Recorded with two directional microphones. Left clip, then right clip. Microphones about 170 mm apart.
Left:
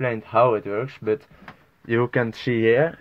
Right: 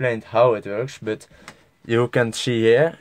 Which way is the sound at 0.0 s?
35° right (ahead or behind).